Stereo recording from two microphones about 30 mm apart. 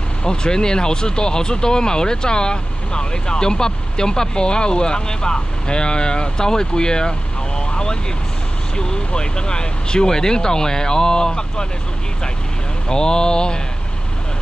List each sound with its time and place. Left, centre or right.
0.2 s speech: left
12.8 s speech: left